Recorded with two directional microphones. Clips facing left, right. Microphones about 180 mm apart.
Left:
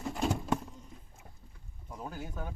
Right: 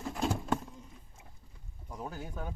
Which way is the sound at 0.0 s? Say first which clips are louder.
Left 1 dB; centre (ahead or behind).